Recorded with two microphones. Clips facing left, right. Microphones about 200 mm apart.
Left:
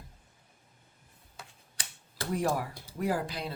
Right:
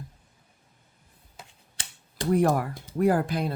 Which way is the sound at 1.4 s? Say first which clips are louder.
Right 1 dB; 20° right (ahead or behind).